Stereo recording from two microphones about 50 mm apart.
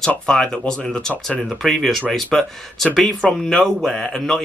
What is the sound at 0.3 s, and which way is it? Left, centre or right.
Speech, centre.